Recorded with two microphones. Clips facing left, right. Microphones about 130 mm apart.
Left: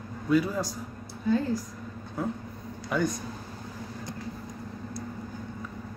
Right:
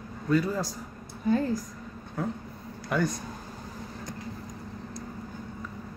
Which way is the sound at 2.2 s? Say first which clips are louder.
Left 1 dB; 5° left (ahead or behind).